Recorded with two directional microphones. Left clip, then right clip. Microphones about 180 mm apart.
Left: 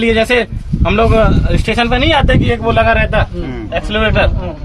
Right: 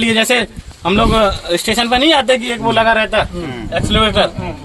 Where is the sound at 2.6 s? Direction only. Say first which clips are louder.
Even; 15° left (ahead or behind).